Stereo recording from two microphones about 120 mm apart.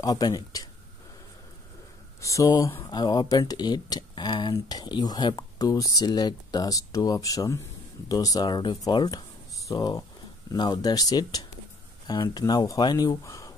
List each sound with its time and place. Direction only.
0.0 s speech: 30° left (ahead or behind)
2.2 s speech: 30° left (ahead or behind)